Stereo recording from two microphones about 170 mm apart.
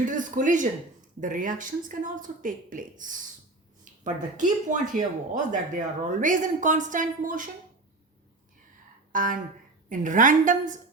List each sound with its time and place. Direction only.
0.0 s speech: 50° right (ahead or behind)
9.1 s speech: 50° right (ahead or behind)